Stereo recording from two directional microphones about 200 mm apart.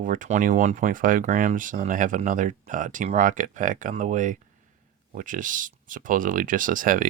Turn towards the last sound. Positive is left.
turn(degrees=-45)  # may be behind; listen again after turning